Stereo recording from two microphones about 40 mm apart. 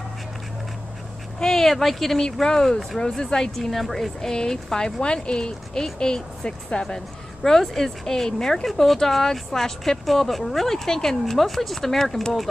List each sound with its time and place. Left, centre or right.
1.4 s speech: centre
3.0 s speech: centre
3.5 s speech: centre